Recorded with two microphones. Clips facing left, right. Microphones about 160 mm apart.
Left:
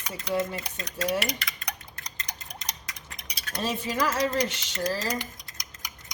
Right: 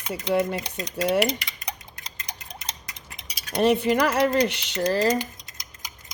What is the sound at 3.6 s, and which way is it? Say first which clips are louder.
Speech: right 9 dB; 65° right (ahead or behind).